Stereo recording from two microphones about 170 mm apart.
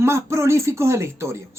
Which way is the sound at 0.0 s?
15° right (ahead or behind).